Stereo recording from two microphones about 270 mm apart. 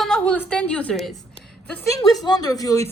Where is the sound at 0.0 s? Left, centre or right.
Centre.